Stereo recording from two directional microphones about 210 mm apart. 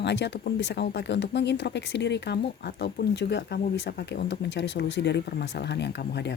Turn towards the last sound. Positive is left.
turn(degrees=55)  # may be behind; listen again after turning